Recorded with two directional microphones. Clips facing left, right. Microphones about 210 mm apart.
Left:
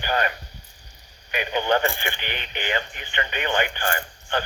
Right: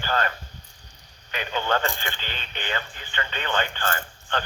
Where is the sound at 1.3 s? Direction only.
15° left (ahead or behind).